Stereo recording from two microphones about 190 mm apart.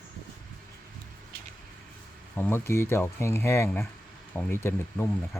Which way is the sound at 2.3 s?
10° left (ahead or behind).